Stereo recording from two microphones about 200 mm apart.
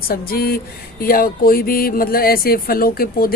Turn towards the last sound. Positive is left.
turn(degrees=45)  # may be behind; listen again after turning